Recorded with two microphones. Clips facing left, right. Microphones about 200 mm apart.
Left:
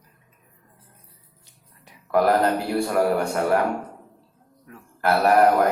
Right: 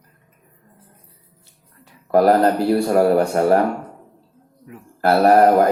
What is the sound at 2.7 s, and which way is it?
Speech, 35° right (ahead or behind).